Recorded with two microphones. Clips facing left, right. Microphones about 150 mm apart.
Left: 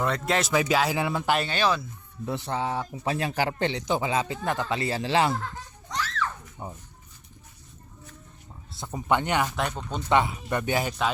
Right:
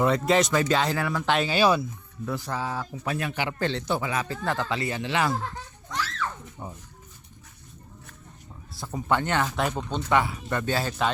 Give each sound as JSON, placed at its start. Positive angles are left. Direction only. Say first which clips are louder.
{"t": 0.0, "sound": "speech", "louder": "right 4 dB", "side_deg": 0}
{"t": 0.9, "sound": "speech", "louder": "left 1 dB", "side_deg": 20}
{"t": 1.3, "sound": "speech", "louder": "right 2 dB", "side_deg": 0}
{"t": 1.5, "sound": "speech", "louder": "right 4 dB", "side_deg": -10}
{"t": 2.2, "sound": "speech", "louder": "left 1 dB", "side_deg": 25}
{"t": 3.6, "sound": "speech", "louder": "left 1 dB", "side_deg": 15}
{"t": 4.7, "sound": "speech", "louder": "left 2 dB", "side_deg": 30}
{"t": 6.6, "sound": "a sound", "louder": "left 1 dB", "side_deg": 25}
{"t": 8.7, "sound": "speech", "louder": "left 1 dB", "side_deg": 20}
{"t": 9.6, "sound": "speech", "louder": "right 2 dB", "side_deg": 0}
{"t": 10.1, "sound": "speech", "louder": "left 2 dB", "side_deg": 20}